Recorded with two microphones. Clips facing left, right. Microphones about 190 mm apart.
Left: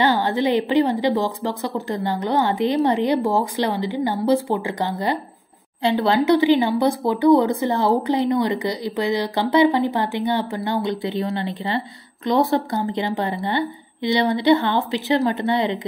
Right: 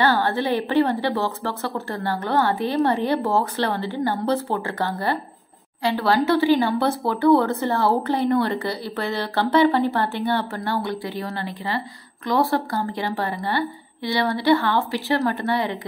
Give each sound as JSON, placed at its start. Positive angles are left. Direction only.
{"t": 0.0, "sound": "a woman's voice", "side_deg": 15}